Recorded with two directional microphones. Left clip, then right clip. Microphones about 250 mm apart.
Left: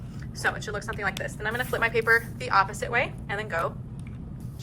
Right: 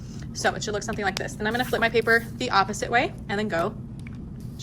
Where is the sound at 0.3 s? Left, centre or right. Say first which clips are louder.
Right 3 dB; right.